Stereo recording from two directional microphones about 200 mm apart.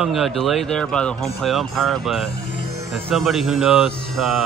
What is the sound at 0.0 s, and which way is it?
Speech, 5° right (ahead or behind).